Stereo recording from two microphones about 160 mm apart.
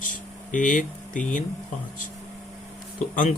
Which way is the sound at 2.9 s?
55° left (ahead or behind).